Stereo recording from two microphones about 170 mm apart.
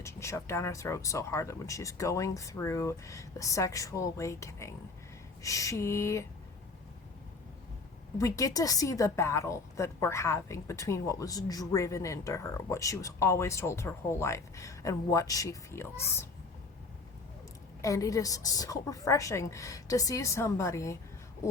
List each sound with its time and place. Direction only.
0.0 s a woman's voice: 15° left (ahead or behind)
8.2 s a woman's voice: 20° left (ahead or behind)
17.8 s a woman's voice: 20° left (ahead or behind)